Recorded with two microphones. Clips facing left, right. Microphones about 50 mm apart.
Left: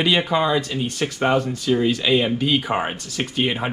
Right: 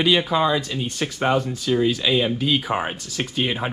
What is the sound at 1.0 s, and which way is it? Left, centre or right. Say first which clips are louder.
Speech: left 1 dB; left.